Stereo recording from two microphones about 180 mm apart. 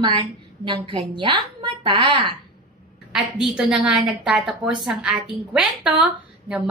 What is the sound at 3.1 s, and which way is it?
A woman's voice, centre (ahead or behind).